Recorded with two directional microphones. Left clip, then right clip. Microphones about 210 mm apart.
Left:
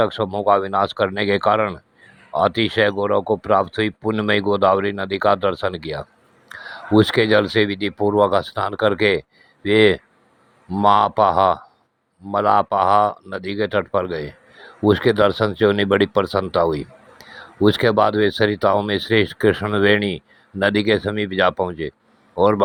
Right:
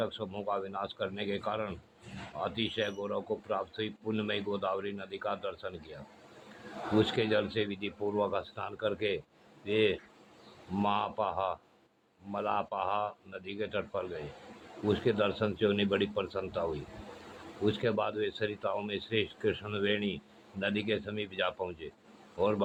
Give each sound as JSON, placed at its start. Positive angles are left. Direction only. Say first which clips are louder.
{"t": 0.0, "sound": "speech", "louder": "left 17 dB", "side_deg": 45}
{"t": 17.7, "sound": "speech", "louder": "left 16 dB", "side_deg": 45}